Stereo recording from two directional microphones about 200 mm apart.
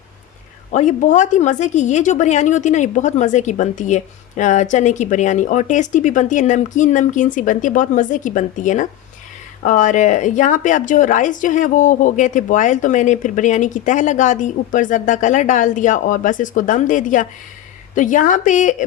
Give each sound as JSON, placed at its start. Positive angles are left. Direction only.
{"t": 0.7, "sound": "a woman's voice", "side_deg": 35}